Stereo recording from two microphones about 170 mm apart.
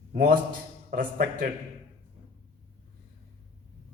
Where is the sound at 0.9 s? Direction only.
55° right (ahead or behind).